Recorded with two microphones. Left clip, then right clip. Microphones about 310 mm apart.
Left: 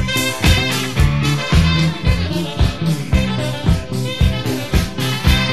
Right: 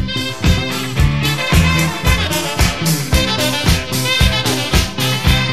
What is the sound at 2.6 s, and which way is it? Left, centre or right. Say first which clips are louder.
Music: right 5 dB; right.